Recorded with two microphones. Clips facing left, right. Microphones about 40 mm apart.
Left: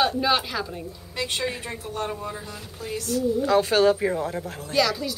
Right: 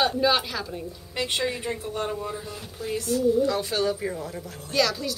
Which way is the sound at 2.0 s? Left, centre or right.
Centre.